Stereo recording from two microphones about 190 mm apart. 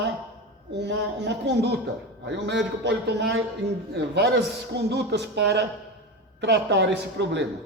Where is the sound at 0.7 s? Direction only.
65° right (ahead or behind).